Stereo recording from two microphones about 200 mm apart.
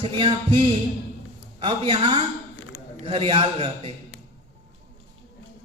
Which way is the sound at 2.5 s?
80° left.